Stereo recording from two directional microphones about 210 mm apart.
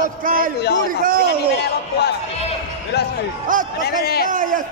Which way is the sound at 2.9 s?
55° left (ahead or behind).